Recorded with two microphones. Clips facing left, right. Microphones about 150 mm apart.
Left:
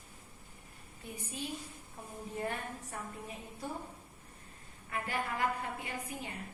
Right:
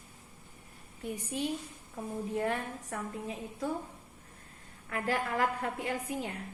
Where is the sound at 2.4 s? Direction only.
85° right.